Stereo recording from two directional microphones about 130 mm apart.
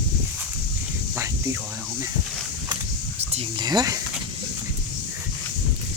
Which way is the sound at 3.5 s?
30° right (ahead or behind).